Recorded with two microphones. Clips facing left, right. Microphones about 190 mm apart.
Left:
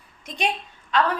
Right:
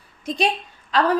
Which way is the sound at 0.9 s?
35° right (ahead or behind).